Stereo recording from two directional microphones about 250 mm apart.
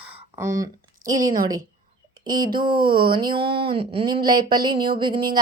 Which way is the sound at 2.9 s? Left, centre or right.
Right.